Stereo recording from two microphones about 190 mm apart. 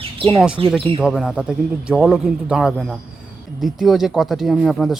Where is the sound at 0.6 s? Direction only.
25° right (ahead or behind).